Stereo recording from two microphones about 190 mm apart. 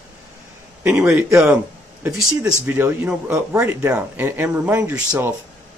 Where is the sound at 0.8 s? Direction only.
10° right (ahead or behind).